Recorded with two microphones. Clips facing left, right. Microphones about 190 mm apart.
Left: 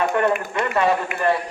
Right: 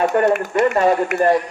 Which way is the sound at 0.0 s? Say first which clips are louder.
Right 4 dB; 40° right (ahead or behind).